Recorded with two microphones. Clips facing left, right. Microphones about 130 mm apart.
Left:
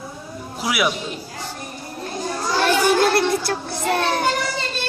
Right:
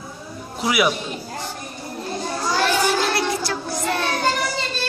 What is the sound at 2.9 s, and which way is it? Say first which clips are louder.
Child singing: left 4 dB; 55° left (ahead or behind).